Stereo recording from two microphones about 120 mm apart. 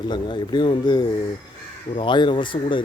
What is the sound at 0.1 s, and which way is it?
Speech, 40° left (ahead or behind).